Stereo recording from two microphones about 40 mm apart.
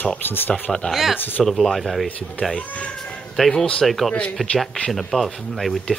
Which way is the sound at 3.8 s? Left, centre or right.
Centre.